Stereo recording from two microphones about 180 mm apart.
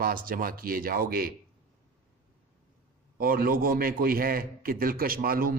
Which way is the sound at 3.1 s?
55° right (ahead or behind).